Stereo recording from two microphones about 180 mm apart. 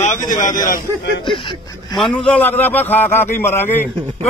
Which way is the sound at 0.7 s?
60° left (ahead or behind).